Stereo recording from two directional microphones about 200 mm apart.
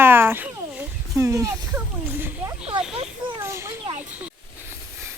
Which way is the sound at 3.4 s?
15° right (ahead or behind).